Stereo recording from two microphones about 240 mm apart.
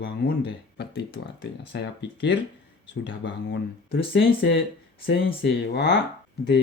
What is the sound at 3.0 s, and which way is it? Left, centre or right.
Speech, left.